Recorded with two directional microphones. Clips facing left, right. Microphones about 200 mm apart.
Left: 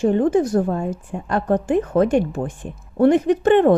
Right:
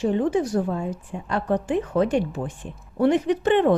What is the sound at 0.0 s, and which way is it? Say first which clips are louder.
A woman's voice: left 5 dB; 50° left (ahead or behind).